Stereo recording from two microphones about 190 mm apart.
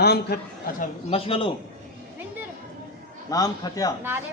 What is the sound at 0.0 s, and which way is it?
Speech, 60° left (ahead or behind).